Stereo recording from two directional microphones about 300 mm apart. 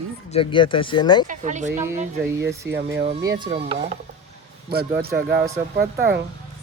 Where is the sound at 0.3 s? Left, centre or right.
Centre.